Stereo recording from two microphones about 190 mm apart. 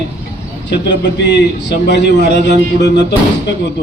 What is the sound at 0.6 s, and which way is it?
A man's voice, 65° left (ahead or behind).